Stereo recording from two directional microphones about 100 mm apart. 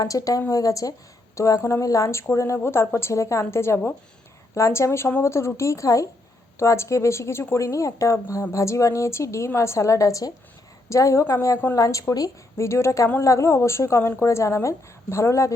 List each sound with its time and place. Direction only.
0.0 s a woman's voice: 35° left (ahead or behind)